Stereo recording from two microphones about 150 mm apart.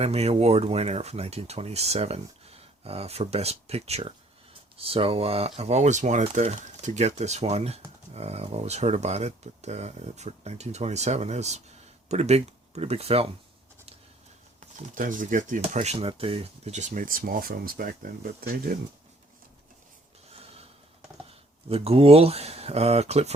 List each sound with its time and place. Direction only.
0.0 s speech: 45° right (ahead or behind)
14.6 s speech: 55° right (ahead or behind)
15.6 s speech: 45° right (ahead or behind); by 18.5 s 75° right (ahead or behind)
21.2 s speech: 40° right (ahead or behind)